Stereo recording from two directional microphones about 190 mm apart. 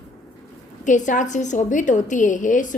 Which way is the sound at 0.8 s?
40° left (ahead or behind).